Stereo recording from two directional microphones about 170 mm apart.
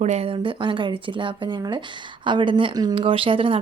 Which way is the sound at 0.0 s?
40° right (ahead or behind).